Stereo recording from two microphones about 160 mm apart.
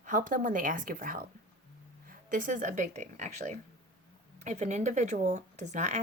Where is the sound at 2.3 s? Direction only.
55° right (ahead or behind).